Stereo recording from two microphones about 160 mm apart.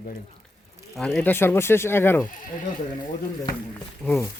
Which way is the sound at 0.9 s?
5° left (ahead or behind).